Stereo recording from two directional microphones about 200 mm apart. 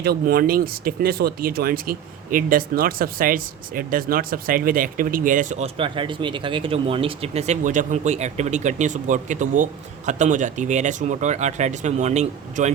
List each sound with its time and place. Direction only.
0.0 s speech: 50° right (ahead or behind); by 12.7 s 35° right (ahead or behind)